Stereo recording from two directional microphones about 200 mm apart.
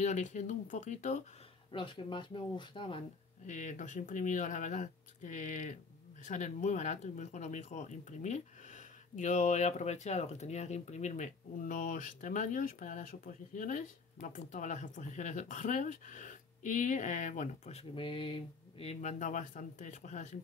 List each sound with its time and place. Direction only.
0.0 s speech: 35° left (ahead or behind)
1.7 s speech: 25° left (ahead or behind)
3.4 s speech: 40° left (ahead or behind)